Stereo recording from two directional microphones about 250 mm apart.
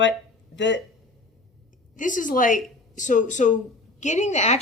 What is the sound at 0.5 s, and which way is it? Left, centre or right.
Speech, left.